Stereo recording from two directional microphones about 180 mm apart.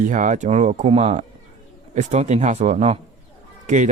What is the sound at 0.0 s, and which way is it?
Speech, 45° right (ahead or behind).